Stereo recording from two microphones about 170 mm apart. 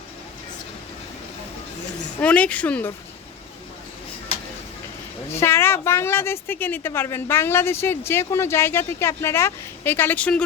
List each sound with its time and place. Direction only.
2.2 s a woman's voice: 5° left (ahead or behind)
5.3 s a woman's voice: 15° left (ahead or behind)